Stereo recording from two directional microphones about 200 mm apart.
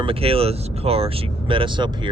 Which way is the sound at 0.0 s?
30° right (ahead or behind).